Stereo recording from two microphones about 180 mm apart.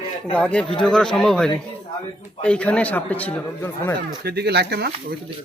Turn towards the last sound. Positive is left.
turn(degrees=-65)  # may be behind; listen again after turning